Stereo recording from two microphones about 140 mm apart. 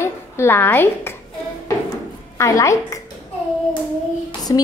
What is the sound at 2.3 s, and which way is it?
Speech, 20° left (ahead or behind).